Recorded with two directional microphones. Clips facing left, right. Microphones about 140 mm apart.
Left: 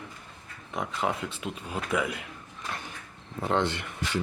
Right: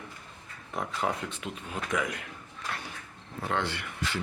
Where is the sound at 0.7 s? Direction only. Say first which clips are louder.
Left 1 dB; 20° left (ahead or behind).